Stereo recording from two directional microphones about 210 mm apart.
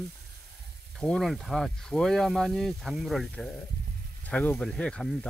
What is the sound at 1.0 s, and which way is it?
Speech, centre (ahead or behind).